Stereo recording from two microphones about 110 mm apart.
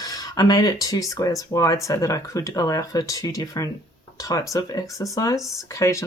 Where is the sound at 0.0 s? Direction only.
35° left (ahead or behind).